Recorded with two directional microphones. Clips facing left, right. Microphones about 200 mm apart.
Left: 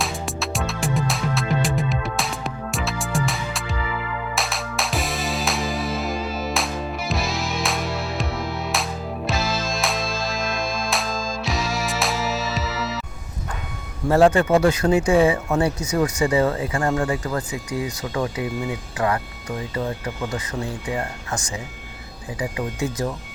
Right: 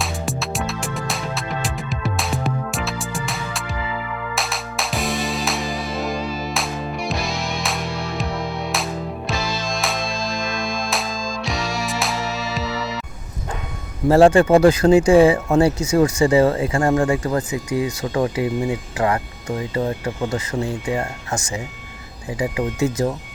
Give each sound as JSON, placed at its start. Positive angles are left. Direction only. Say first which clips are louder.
{"t": 0.0, "sound": "music", "louder": "right 1 dB", "side_deg": 0}
{"t": 14.1, "sound": "speech", "louder": "right 4 dB", "side_deg": -30}